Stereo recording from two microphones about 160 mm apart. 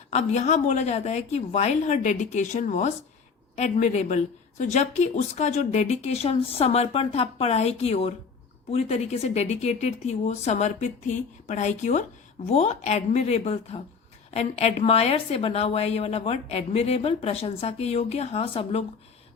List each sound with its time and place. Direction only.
0.1 s a woman's voice: 45° left (ahead or behind)